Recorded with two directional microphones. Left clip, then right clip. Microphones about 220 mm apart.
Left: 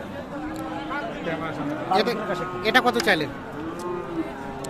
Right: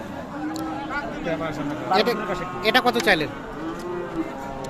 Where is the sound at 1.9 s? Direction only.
10° right (ahead or behind).